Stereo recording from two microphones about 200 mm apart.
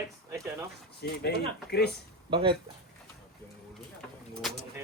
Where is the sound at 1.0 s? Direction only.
50° left (ahead or behind).